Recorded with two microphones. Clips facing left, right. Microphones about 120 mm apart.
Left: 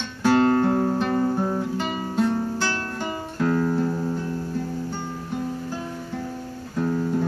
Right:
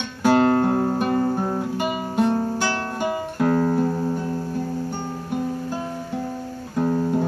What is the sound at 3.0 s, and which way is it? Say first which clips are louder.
Guitar: right 4 dB; 60° right (ahead or behind).